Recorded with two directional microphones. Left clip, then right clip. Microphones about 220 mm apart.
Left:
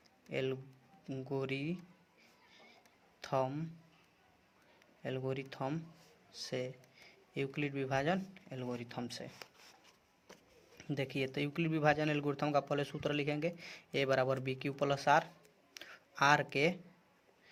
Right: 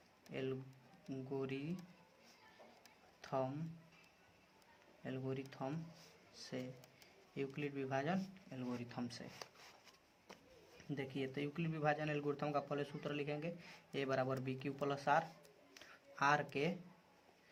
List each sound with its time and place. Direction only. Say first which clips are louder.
0.3 s speech: left 7 dB; 45° left (ahead or behind)
3.2 s speech: left 6 dB; 40° left (ahead or behind)
5.0 s speech: left 6 dB; 40° left (ahead or behind)
10.8 s speech: left 7 dB; 45° left (ahead or behind)
15.7 s a sound: left 7 dB; 40° left (ahead or behind)